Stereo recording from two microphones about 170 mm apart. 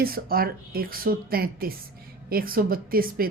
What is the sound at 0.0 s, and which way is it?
A woman's voice, 60° right (ahead or behind).